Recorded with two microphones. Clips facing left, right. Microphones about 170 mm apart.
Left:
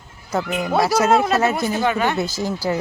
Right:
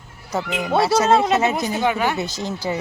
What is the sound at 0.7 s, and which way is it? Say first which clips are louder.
Speech: right 1 dB; 25° right (ahead or behind).